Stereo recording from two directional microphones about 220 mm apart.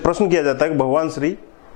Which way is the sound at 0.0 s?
20° left (ahead or behind).